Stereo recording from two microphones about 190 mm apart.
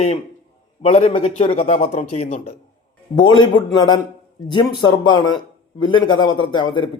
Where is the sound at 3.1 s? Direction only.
25° left (ahead or behind).